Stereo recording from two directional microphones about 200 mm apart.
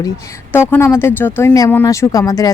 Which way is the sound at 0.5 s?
10° left (ahead or behind).